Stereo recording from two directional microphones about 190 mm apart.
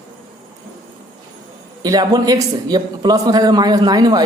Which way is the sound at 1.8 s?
20° right (ahead or behind).